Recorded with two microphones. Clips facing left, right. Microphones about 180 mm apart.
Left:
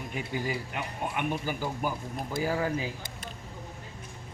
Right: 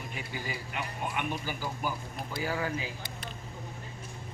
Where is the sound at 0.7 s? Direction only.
45° left (ahead or behind).